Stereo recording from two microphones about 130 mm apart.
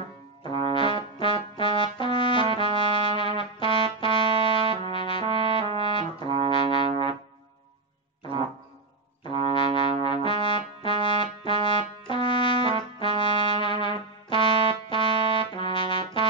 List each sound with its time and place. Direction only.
0.7 s brass instrument: 40° left (ahead or behind)
5.2 s brass instrument: 45° right (ahead or behind)
5.8 s brass instrument: 40° left (ahead or behind)
9.2 s brass instrument: 40° left (ahead or behind)
13.2 s trumpet: 40° left (ahead or behind)